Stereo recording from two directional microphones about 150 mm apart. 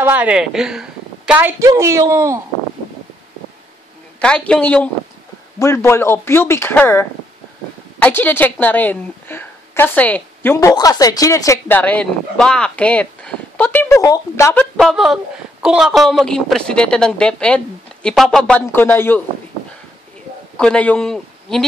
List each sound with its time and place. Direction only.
0.0 s a woman's voice: 10° right (ahead or behind)
1.6 s speech: 20° right (ahead or behind)
4.2 s speech: 5° left (ahead or behind)
5.6 s a woman's voice: 20° left (ahead or behind)
14.8 s a woman's voice: centre (ahead or behind)
20.5 s a man's voice: 5° left (ahead or behind)